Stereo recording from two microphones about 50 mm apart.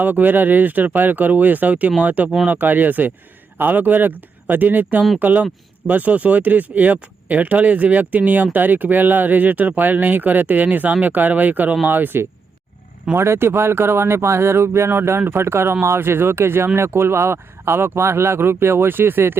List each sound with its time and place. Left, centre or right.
0.0 s speech: right
13.1 s speech: right